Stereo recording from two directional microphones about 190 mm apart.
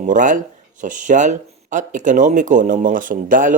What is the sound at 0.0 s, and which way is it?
Speech, 40° right (ahead or behind).